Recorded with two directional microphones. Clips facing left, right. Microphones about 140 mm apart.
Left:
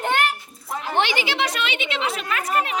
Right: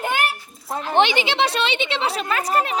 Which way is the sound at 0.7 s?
20° right (ahead or behind).